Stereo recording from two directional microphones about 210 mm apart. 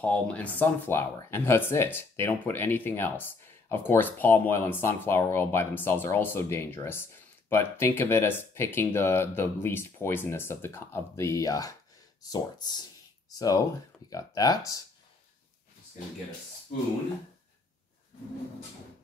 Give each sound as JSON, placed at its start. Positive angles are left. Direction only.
{"t": 0.0, "sound": "speech", "side_deg": 5}